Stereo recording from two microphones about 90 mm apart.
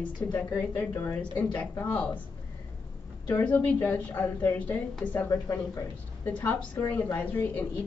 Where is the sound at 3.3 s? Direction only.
20° left (ahead or behind).